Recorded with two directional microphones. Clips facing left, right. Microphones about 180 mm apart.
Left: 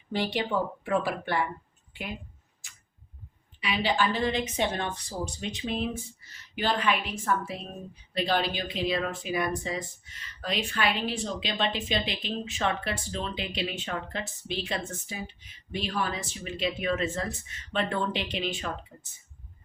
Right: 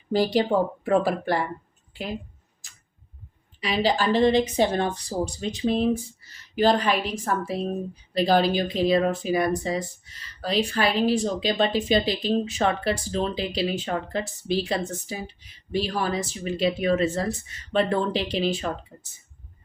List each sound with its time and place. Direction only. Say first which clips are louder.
0.1 s speech: right 7 dB; 40° right (ahead or behind)
3.6 s speech: right 4 dB; 40° right (ahead or behind)